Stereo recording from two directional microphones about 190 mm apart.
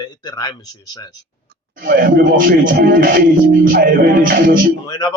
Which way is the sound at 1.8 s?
50° right (ahead or behind).